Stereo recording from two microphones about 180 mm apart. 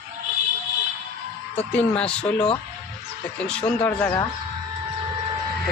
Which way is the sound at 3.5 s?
5° left (ahead or behind).